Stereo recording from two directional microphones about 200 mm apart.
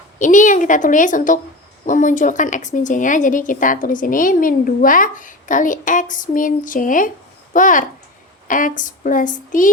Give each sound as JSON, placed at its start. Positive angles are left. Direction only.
{"t": 0.2, "sound": "a woman's voice", "side_deg": 40}